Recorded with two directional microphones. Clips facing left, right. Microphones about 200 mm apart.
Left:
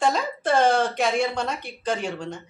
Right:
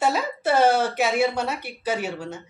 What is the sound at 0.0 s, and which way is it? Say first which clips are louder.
A woman's voice: even; 5° right (ahead or behind).